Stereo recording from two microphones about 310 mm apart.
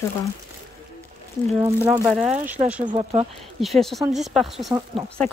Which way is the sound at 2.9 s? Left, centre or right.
Centre.